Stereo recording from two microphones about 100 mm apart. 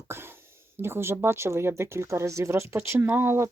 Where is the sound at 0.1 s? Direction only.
20° right (ahead or behind).